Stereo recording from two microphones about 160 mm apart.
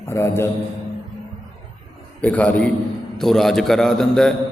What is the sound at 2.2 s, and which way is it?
A man's voice, 10° left (ahead or behind).